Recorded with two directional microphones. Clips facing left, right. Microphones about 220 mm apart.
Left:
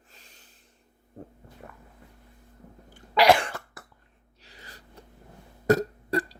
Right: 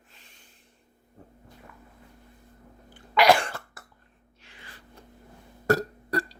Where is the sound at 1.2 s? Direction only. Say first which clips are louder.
Left 8 dB; 45° left (ahead or behind).